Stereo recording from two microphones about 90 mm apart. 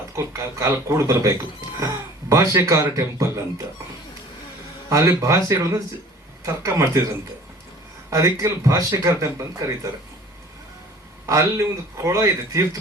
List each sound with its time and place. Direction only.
0.2 s speech: 35° right (ahead or behind)
4.9 s speech: 35° right (ahead or behind)
8.1 s speech: 35° right (ahead or behind)
11.3 s speech: 35° right (ahead or behind)